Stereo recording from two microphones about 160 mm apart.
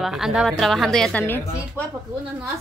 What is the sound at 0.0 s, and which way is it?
A woman's voice, centre (ahead or behind).